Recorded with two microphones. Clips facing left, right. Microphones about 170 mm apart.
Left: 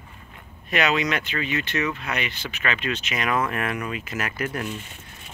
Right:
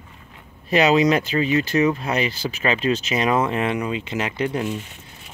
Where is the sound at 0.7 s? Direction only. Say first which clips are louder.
Right 7 dB; 30° right (ahead or behind).